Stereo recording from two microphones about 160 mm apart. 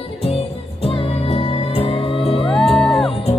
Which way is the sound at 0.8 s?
35° left (ahead or behind).